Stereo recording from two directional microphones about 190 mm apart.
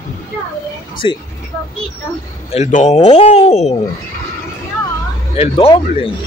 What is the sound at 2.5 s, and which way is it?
Speech, 40° left (ahead or behind).